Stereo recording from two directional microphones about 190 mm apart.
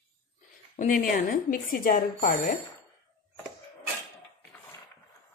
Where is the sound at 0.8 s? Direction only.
45° left (ahead or behind).